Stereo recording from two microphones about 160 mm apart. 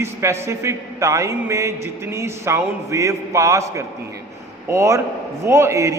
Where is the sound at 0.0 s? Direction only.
15° right (ahead or behind).